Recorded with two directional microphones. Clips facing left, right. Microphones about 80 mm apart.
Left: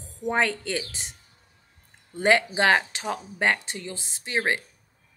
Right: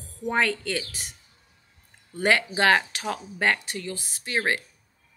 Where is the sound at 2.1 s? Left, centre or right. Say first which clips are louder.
Left 2 dB; left.